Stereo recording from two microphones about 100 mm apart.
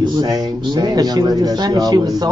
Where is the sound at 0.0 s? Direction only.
45° right (ahead or behind).